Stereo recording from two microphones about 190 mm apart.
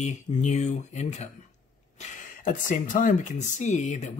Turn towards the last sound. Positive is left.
turn(degrees=40)  # may be behind; listen again after turning